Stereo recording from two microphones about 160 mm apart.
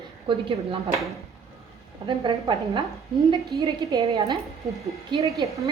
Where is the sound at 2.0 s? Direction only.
35° right (ahead or behind).